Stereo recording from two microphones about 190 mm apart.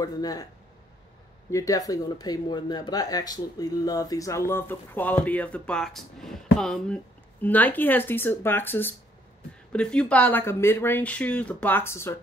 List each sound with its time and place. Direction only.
0.0 s a man's voice: 20° left (ahead or behind)
1.5 s speech: 15° left (ahead or behind)